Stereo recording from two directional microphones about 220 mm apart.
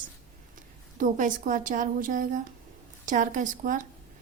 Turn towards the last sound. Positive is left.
turn(degrees=-35)  # may be behind; listen again after turning